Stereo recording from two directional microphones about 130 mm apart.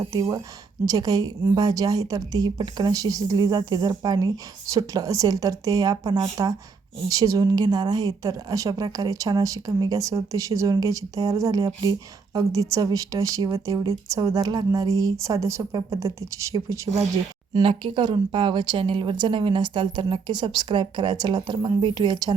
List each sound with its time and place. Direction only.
0.0 s a woman's voice: 25° right (ahead or behind)
17.5 s speech: 40° right (ahead or behind)